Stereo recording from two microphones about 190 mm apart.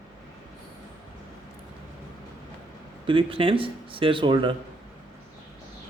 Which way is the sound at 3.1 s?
30° right (ahead or behind).